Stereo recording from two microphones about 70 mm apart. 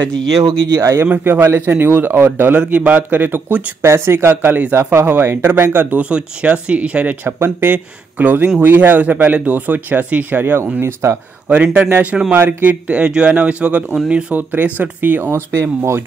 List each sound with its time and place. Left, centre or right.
0.7 s speech: right
1.0 s speech: right
2.6 s speech: centre
3.8 s speech: right
7.3 s speech: right
11.4 s speech: centre
12.4 s speech: right
15.5 s speech: right